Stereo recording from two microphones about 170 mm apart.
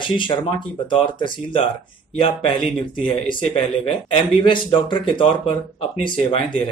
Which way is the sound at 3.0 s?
30° left (ahead or behind).